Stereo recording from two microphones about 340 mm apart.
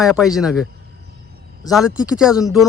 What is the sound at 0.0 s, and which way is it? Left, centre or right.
Speech, centre.